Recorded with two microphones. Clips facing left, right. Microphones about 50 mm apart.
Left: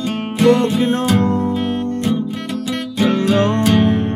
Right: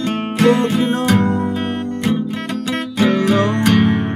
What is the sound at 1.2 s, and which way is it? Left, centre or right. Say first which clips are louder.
Music: left 1 dB; right.